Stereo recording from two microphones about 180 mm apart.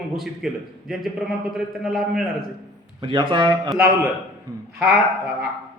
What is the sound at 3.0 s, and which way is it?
Speech, 30° right (ahead or behind).